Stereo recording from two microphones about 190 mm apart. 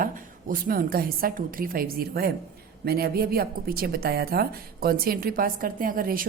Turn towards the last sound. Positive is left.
turn(degrees=-50)  # may be behind; listen again after turning